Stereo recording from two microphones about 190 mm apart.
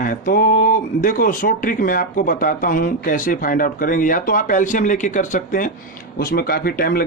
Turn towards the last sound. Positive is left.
turn(degrees=50)  # may be behind; listen again after turning